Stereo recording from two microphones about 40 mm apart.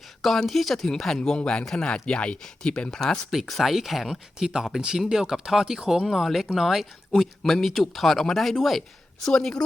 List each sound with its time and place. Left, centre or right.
0.4 s speech: centre
1.4 s speech: left
3.3 s speech: centre
4.4 s speech: centre
6.2 s speech: centre